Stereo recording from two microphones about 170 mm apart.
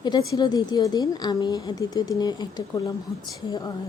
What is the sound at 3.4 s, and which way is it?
Speech, 20° left (ahead or behind).